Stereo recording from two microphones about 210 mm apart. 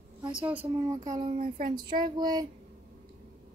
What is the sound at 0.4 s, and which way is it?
Speech, 5° right (ahead or behind).